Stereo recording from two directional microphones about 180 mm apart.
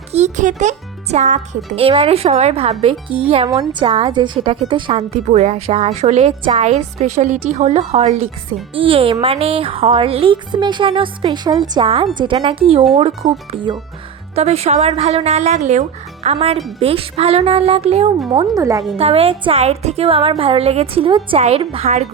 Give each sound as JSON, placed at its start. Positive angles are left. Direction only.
{"t": 0.1, "sound": "a woman's voice", "side_deg": -40}
{"t": 18.3, "sound": "speech", "side_deg": -20}
{"t": 18.9, "sound": "a woman's voice", "side_deg": -35}